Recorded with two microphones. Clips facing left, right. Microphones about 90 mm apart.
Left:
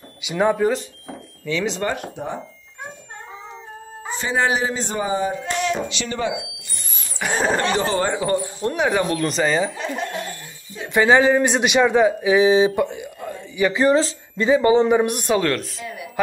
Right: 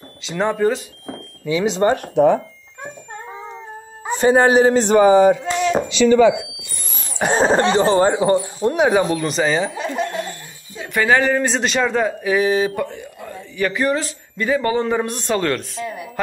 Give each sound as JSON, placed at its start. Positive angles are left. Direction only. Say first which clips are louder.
{"t": 0.2, "sound": "speech", "louder": "even", "side_deg": 10}
{"t": 1.4, "sound": "speech", "louder": "right 6 dB", "side_deg": -20}
{"t": 2.2, "sound": "speech", "louder": "right 17 dB", "side_deg": -80}
{"t": 4.1, "sound": "a man's voice", "louder": "right 8 dB", "side_deg": -45}
{"t": 7.2, "sound": "speech", "louder": "right 5 dB", "side_deg": -30}
{"t": 9.2, "sound": "speech", "louder": "right 1 dB", "side_deg": 0}
{"t": 10.9, "sound": "speech", "louder": "left 2 dB", "side_deg": 20}